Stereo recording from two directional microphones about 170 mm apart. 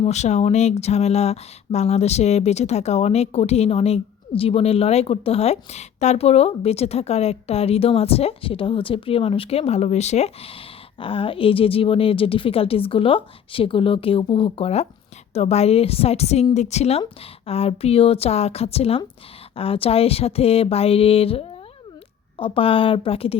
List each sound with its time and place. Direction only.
0.0 s speech: 40° left (ahead or behind)